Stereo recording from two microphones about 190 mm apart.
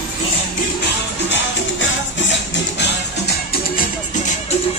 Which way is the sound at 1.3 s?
75° left (ahead or behind).